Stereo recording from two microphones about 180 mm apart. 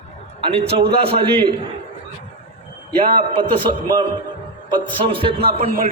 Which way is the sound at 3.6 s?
25° right (ahead or behind).